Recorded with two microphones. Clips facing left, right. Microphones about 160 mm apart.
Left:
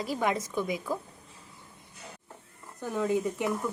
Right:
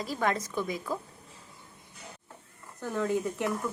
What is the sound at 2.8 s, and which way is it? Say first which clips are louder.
Speech: left 1 dB; 10° left (ahead or behind).